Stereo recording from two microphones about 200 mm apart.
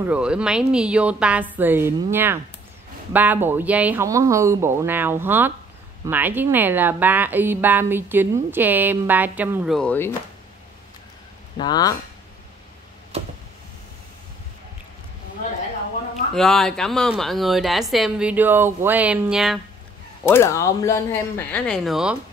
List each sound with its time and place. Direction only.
0.0 s speech: 5° right (ahead or behind)
9.8 s speech: 10° left (ahead or behind)
11.5 s speech: 20° left (ahead or behind)
16.3 s a woman's voice: centre (ahead or behind)
20.2 s speech: 15° left (ahead or behind)